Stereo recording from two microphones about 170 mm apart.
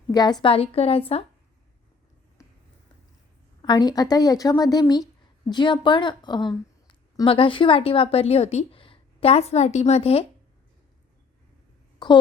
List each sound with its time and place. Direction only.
0.1 s a woman's voice: 25° left (ahead or behind)
3.6 s a woman's voice: 25° left (ahead or behind)
12.0 s a woman's voice: 25° left (ahead or behind)